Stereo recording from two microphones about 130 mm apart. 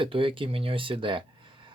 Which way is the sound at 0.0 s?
40° right (ahead or behind).